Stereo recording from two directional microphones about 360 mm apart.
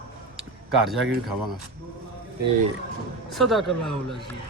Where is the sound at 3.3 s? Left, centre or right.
Centre.